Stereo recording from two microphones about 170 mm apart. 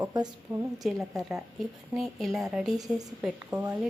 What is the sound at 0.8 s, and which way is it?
Speech, centre (ahead or behind).